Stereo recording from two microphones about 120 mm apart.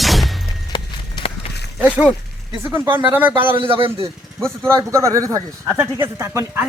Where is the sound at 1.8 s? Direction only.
10° right (ahead or behind).